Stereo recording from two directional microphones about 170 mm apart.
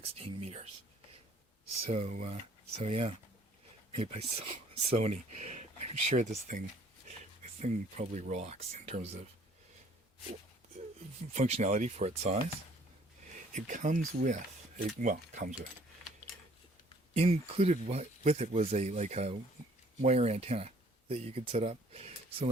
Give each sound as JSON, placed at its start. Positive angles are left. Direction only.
{"t": 0.0, "sound": "speech", "side_deg": -35}
{"t": 1.8, "sound": "speech", "side_deg": -40}
{"t": 7.6, "sound": "speech", "side_deg": -45}
{"t": 11.3, "sound": "speech", "side_deg": -40}
{"t": 13.5, "sound": "speech", "side_deg": -50}
{"t": 17.2, "sound": "speech", "side_deg": -40}